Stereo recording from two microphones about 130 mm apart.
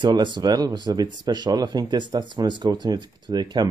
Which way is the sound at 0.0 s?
35° right (ahead or behind).